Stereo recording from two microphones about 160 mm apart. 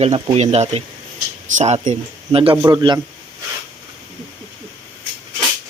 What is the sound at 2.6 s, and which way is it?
Speech, 25° right (ahead or behind).